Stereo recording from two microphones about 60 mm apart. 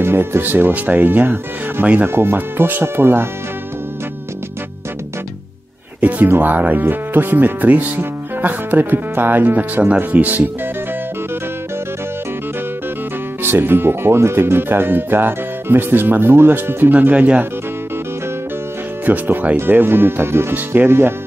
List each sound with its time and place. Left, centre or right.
0.0 s speech: right
5.9 s music: right
6.2 s speech: right
13.4 s speech: right
16.9 s speech: right
19.0 s speech: right